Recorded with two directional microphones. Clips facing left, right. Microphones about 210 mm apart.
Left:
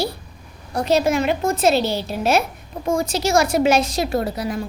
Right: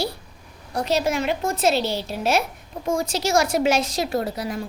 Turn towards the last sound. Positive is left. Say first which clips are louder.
# left 3 dB
turn(degrees=60)  # may be behind; listen again after turning